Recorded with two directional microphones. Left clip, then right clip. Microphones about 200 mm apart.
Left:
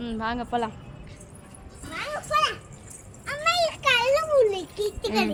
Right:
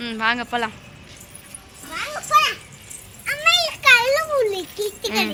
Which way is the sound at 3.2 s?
20° right (ahead or behind).